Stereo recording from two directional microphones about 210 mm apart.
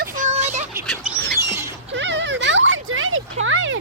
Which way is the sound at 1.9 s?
60° right (ahead or behind).